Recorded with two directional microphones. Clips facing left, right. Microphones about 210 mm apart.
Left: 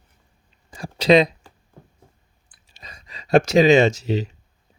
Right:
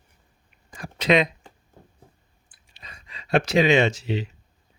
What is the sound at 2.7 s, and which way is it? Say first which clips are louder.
Speech: left 3 dB; 40° left (ahead or behind).